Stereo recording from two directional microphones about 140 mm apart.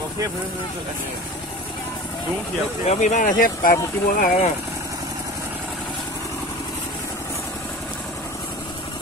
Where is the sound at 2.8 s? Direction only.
60° left (ahead or behind); by 3.8 s 90° left.